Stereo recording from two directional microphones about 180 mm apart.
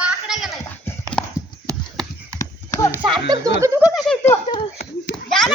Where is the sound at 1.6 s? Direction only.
15° right (ahead or behind).